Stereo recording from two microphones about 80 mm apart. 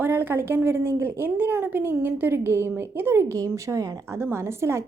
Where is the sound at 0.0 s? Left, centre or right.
Right.